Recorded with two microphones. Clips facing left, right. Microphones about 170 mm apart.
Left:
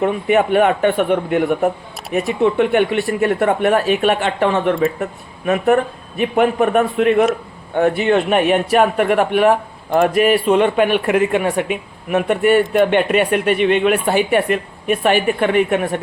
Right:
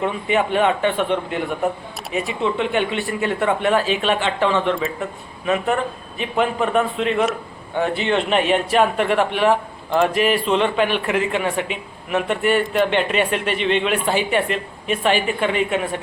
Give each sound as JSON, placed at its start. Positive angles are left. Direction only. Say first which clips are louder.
{"t": 0.3, "sound": "a man's voice", "louder": "left 4 dB", "side_deg": 50}